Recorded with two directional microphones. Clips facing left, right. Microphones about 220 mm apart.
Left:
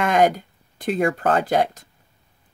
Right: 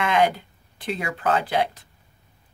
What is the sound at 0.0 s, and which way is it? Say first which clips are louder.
Speech: left 3 dB; 45° left (ahead or behind).